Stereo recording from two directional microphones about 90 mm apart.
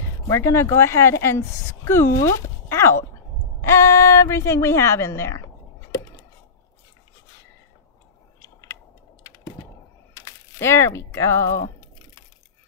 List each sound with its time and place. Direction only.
0.3 s a woman's voice: 30° left (ahead or behind)
10.1 s speech: 30° left (ahead or behind)